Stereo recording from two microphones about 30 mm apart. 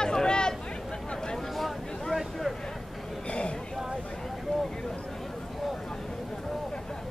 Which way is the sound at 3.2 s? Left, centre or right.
Left.